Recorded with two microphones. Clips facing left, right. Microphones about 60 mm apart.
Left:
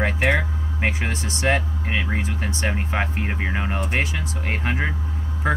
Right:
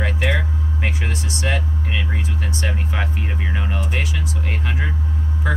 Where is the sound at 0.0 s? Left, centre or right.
Left.